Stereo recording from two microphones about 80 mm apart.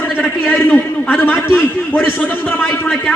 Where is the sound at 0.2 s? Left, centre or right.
Left.